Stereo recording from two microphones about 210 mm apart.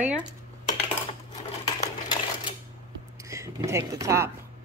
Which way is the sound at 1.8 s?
20° left (ahead or behind).